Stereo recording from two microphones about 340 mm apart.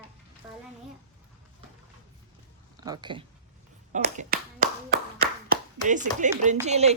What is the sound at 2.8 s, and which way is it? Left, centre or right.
Speech, centre.